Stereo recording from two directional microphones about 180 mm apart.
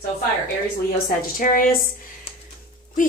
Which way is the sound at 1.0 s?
50° left (ahead or behind).